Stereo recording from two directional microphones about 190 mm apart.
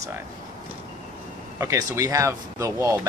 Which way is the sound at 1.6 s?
15° right (ahead or behind).